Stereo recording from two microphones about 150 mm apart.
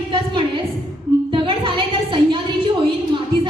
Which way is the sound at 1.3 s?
35° right (ahead or behind).